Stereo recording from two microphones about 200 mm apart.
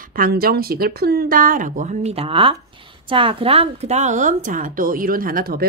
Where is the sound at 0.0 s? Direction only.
45° right (ahead or behind).